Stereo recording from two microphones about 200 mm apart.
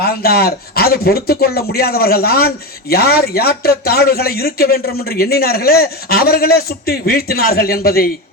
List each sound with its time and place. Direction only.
0.2 s a man's voice: 50° left (ahead or behind)